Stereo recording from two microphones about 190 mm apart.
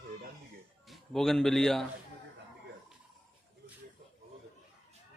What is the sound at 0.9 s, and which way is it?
Speech, centre (ahead or behind).